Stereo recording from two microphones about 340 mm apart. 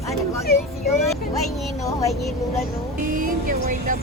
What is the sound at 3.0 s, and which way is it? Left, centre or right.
Music, right.